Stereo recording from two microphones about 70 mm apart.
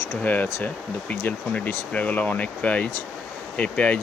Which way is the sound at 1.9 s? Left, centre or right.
Left.